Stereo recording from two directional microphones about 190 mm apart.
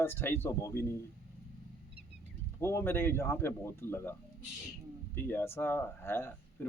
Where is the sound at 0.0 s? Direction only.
10° left (ahead or behind).